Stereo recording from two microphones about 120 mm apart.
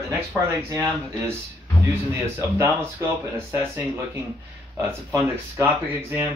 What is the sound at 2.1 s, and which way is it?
Speech, 25° right (ahead or behind).